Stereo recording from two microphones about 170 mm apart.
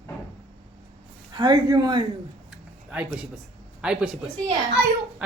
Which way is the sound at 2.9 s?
10° right (ahead or behind).